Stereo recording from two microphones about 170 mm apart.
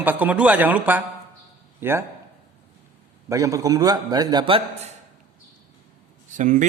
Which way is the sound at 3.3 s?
20° right (ahead or behind).